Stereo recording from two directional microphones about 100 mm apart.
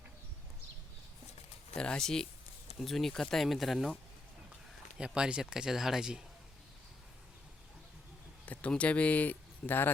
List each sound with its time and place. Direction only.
1.7 s speech: 10° left (ahead or behind)
4.9 s speech: 10° right (ahead or behind)
8.4 s speech: 15° left (ahead or behind)